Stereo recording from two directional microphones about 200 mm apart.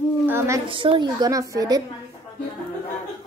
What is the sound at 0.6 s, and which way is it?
A woman's voice, 25° right (ahead or behind).